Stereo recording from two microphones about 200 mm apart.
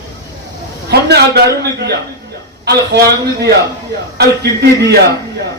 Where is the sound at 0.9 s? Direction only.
55° right (ahead or behind).